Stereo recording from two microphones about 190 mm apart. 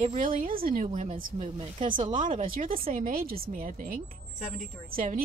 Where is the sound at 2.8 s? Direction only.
45° right (ahead or behind).